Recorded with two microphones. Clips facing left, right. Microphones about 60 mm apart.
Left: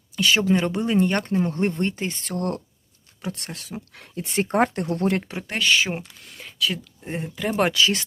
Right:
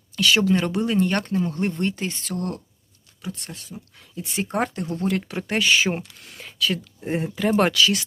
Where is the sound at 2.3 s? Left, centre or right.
Left.